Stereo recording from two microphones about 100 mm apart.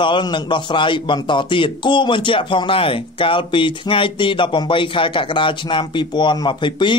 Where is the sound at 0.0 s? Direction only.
50° left (ahead or behind).